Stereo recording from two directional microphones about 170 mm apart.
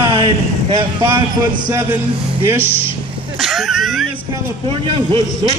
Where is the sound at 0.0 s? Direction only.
25° right (ahead or behind).